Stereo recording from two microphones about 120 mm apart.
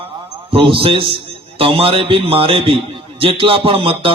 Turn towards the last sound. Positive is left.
turn(degrees=-45)  # may be behind; listen again after turning